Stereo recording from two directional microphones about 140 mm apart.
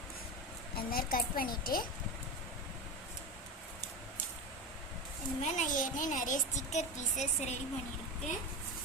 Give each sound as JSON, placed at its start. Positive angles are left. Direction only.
{"t": 0.8, "sound": "a woman's voice", "side_deg": 90}
{"t": 5.4, "sound": "a child's voice", "side_deg": 60}